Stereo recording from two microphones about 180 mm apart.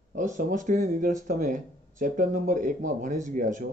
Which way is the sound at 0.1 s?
45° right (ahead or behind).